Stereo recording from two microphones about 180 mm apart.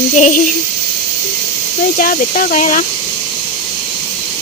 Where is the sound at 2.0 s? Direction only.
50° left (ahead or behind).